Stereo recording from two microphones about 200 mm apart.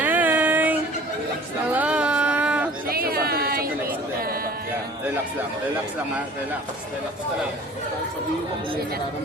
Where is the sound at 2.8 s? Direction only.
50° right (ahead or behind).